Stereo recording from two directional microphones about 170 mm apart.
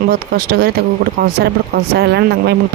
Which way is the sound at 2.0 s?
75° right (ahead or behind).